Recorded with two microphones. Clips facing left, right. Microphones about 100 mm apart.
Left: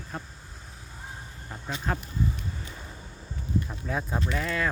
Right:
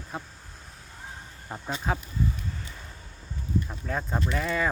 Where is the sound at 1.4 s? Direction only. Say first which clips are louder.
Right 3 dB; 25° right (ahead or behind).